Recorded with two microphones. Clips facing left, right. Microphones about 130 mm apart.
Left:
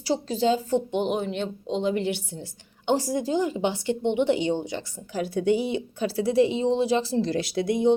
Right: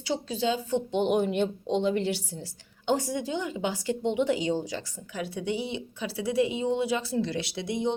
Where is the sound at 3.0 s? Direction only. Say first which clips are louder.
Left 6 dB; 35° left (ahead or behind).